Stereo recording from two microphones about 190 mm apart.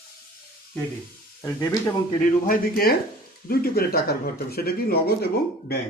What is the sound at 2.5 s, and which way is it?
Speech, 50° left (ahead or behind).